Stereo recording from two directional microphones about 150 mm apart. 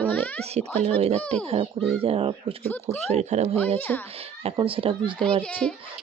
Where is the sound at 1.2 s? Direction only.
10° left (ahead or behind).